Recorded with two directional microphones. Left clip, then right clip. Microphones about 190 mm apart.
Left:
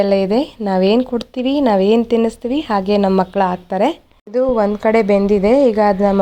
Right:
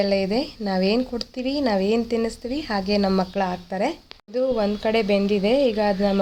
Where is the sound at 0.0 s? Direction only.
35° left (ahead or behind).